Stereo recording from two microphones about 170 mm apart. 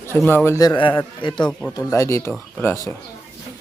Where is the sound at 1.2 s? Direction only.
30° left (ahead or behind).